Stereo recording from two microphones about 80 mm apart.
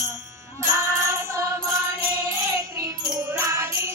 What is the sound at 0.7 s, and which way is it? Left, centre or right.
Music, right.